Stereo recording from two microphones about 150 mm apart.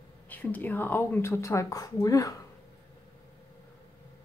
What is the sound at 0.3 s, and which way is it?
Speech, 10° left (ahead or behind).